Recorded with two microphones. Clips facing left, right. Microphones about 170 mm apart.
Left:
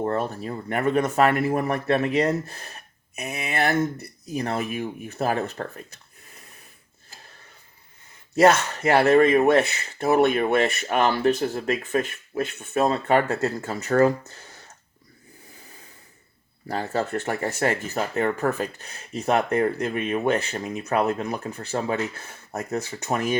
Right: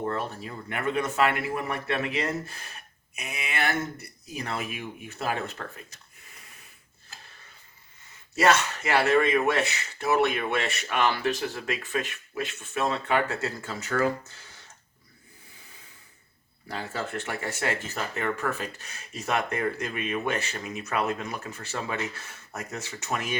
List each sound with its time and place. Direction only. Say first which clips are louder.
0.0 s speech: left 5 dB; 45° left (ahead or behind)
8.8 s speech: left 9 dB; 55° left (ahead or behind)
16.6 s speech: left 7 dB; 45° left (ahead or behind)